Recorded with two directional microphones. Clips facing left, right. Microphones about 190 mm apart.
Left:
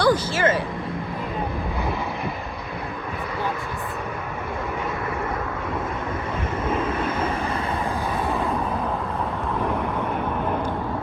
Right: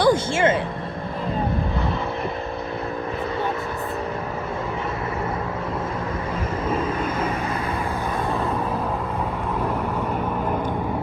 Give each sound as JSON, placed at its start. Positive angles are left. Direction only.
{"t": 0.0, "sound": "speech", "side_deg": -25}